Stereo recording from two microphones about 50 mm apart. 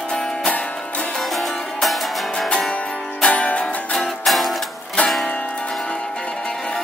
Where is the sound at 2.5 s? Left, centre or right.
Centre.